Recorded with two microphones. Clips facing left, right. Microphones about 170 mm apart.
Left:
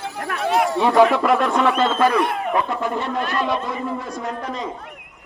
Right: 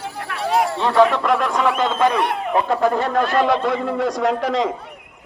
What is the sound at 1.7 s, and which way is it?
Speech, 15° right (ahead or behind).